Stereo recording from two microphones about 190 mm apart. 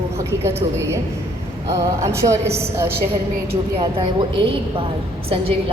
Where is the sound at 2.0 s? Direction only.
15° right (ahead or behind).